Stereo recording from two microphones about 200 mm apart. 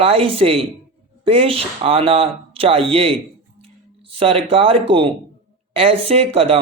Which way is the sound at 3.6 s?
25° right (ahead or behind).